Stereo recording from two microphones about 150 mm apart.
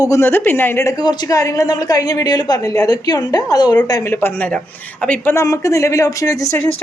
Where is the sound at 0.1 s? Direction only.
15° left (ahead or behind).